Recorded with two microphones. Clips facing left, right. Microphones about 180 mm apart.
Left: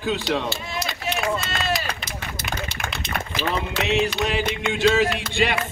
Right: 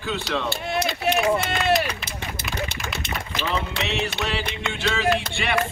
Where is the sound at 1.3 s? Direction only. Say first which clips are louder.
Right 4 dB; 60° right (ahead or behind).